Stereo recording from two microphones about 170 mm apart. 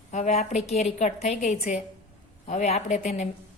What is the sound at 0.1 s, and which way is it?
A woman's voice, 45° left (ahead or behind).